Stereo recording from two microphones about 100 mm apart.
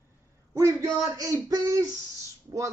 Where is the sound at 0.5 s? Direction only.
35° right (ahead or behind).